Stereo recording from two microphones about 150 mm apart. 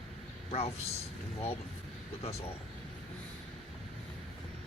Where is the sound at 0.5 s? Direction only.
40° left (ahead or behind).